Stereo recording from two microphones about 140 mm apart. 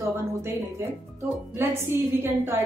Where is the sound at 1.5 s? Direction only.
15° right (ahead or behind).